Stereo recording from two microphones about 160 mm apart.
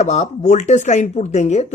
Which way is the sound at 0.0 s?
45° left (ahead or behind).